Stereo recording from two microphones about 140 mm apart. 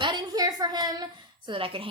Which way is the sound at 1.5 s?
40° right (ahead or behind).